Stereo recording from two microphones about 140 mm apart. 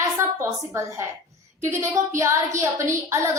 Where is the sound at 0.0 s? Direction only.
20° right (ahead or behind).